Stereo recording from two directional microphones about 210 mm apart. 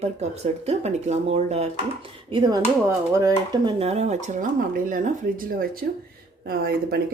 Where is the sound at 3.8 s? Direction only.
30° right (ahead or behind); by 6.9 s 45° right (ahead or behind).